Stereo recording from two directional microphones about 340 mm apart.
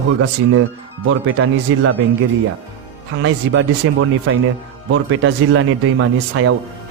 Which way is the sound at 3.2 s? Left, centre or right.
Right.